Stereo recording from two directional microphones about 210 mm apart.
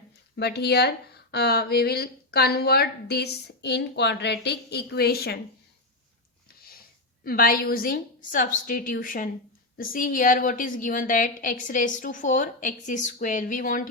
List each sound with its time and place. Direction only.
0.3 s a woman's voice: 50° left (ahead or behind)
7.3 s a woman's voice: 45° left (ahead or behind)